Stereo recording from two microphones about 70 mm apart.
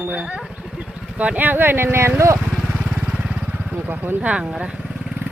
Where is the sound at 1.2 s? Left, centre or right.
Right.